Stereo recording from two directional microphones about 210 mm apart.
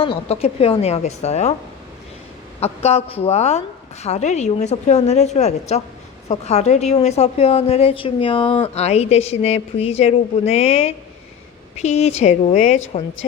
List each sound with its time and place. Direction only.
0.0 s a woman's voice: 25° left (ahead or behind)
2.6 s a woman's voice: 30° left (ahead or behind)